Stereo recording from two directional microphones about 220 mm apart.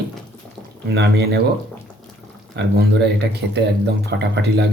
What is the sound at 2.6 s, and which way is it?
Speech, 50° right (ahead or behind).